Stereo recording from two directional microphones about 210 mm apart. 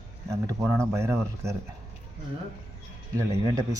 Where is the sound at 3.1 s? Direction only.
15° right (ahead or behind).